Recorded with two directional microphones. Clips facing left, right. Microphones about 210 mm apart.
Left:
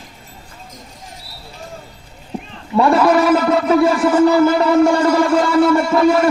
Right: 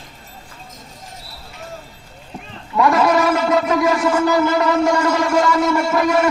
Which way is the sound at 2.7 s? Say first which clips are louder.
Left 3 dB; 30° left (ahead or behind).